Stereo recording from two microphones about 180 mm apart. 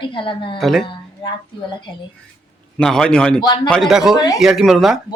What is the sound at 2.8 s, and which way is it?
Speech, 5° left (ahead or behind).